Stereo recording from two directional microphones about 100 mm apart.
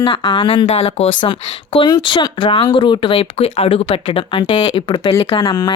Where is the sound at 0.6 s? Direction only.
90° left.